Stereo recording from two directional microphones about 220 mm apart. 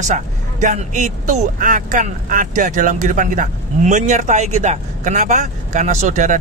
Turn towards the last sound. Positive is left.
turn(degrees=-35)  # may be behind; listen again after turning